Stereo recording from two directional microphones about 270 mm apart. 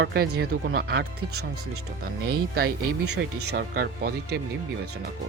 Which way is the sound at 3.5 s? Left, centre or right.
Right.